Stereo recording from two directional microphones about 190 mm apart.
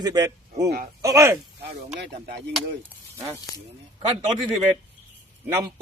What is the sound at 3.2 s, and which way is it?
Speech, 15° right (ahead or behind).